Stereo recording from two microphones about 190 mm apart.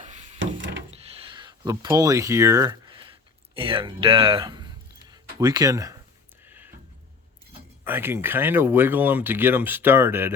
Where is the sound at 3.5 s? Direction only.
30° right (ahead or behind).